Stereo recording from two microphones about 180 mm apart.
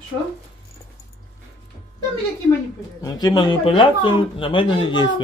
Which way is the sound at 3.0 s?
20° left (ahead or behind).